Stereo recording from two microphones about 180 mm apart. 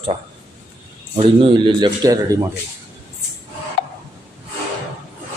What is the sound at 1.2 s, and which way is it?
Speech, 30° right (ahead or behind).